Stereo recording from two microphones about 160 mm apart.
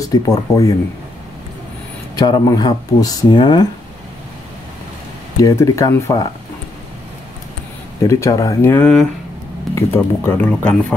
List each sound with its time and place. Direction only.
0.0 s speech: 20° left (ahead or behind)
2.1 s speech: 25° left (ahead or behind)
5.4 s speech: 20° left (ahead or behind)
8.0 s speech: 20° left (ahead or behind)